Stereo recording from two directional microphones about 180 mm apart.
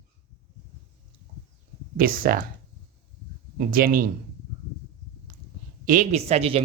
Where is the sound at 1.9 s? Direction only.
55° right (ahead or behind).